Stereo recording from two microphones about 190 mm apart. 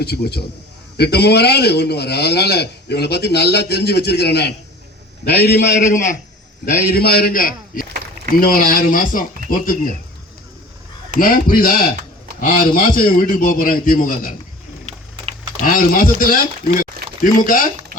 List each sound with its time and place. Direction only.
0.0 s a man's voice: 55° left (ahead or behind)
5.7 s a man's voice: 40° left (ahead or behind)
6.7 s a man's voice: 55° left (ahead or behind)
11.2 s a man's voice: 45° left (ahead or behind)
14.8 s a sound: 30° right (ahead or behind)
15.6 s a man's voice: 50° left (ahead or behind)